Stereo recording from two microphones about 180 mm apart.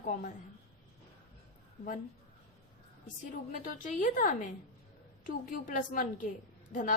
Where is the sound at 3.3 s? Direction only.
45° left (ahead or behind).